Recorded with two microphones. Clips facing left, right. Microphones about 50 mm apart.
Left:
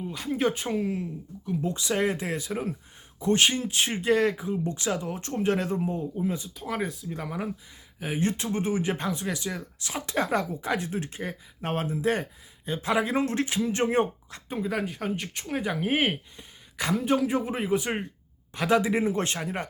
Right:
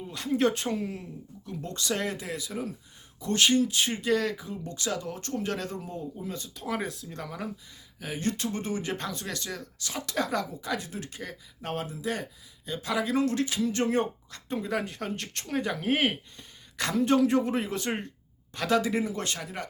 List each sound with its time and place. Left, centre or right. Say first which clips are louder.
0.0 s speech: right 1 dB; centre
6.6 s speech: left 1 dB; centre
7.2 s speech: left 3 dB; centre
14.5 s speech: left 1 dB; centre; by 19.6 s left